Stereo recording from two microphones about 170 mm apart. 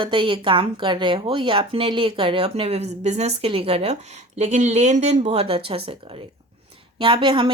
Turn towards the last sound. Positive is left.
turn(degrees=-30)  # may be behind; listen again after turning